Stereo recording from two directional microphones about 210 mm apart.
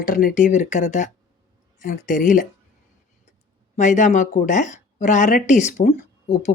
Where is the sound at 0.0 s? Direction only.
40° left (ahead or behind).